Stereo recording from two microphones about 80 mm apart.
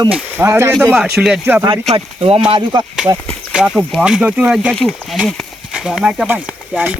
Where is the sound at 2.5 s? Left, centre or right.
Right.